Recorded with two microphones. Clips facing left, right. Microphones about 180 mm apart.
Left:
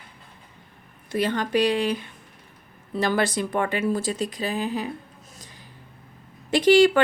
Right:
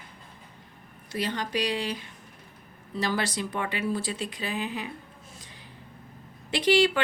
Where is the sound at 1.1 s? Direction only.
55° left (ahead or behind); by 4.9 s 40° left (ahead or behind).